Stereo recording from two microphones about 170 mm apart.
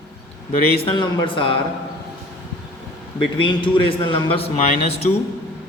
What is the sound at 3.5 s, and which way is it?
A man's voice, 30° left (ahead or behind).